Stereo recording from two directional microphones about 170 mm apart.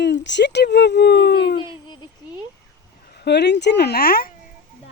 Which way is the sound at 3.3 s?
80° left.